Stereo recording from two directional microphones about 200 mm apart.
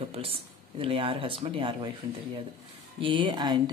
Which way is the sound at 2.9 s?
25° right (ahead or behind).